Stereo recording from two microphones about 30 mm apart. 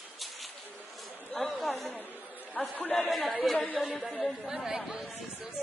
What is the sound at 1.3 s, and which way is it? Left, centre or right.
Chatter, centre.